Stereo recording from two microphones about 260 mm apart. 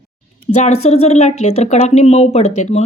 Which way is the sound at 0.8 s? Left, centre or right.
Left.